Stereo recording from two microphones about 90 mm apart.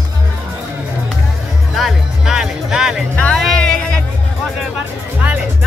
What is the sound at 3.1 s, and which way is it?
Music, 15° left (ahead or behind).